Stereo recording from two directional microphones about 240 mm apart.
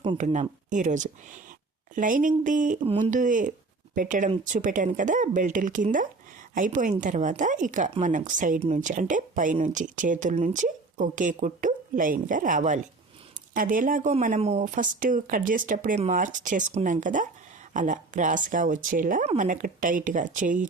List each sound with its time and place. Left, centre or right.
0.0 s a woman's voice: right